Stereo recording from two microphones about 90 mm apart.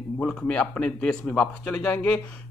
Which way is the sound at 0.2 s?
15° left (ahead or behind).